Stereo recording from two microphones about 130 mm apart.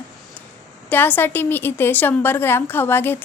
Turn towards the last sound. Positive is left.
turn(degrees=15)  # may be behind; listen again after turning